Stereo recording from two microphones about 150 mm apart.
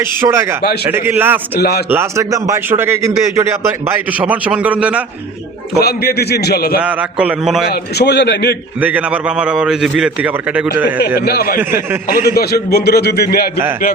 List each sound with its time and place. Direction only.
0.0 s speech: 15° right (ahead or behind)
1.5 s a man's voice: 90° left
1.9 s speech: 20° right (ahead or behind)
5.8 s a man's voice: 90° left
6.8 s speech: 10° right (ahead or behind)
7.7 s a man's voice: 90° left
8.8 s speech: 10° right (ahead or behind)
11.3 s a man's voice: 90° left
12.0 s a man's voice: 75° left (ahead or behind); by 13.4 s 90° left